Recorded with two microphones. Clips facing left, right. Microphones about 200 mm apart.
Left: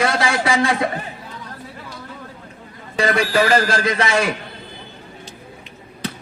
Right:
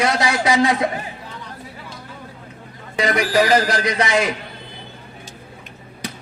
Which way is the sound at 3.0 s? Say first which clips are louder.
Even; 20° right (ahead or behind).